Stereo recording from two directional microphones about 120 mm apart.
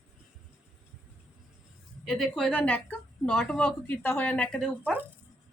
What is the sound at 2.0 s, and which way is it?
A woman's voice, 5° left (ahead or behind).